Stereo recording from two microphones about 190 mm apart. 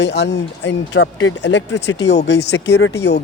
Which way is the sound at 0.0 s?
65° left (ahead or behind).